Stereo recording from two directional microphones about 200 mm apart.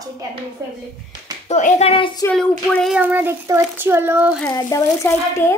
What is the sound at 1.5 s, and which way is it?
Speech, 35° left (ahead or behind).